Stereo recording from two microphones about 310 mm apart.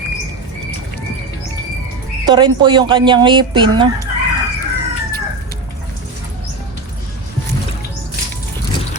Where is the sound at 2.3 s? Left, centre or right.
Centre.